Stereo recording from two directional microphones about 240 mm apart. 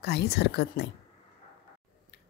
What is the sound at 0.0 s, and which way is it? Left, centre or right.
Speech, left.